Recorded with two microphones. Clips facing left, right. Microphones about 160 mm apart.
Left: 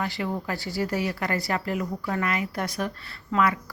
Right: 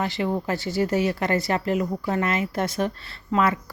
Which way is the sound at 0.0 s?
25° right (ahead or behind).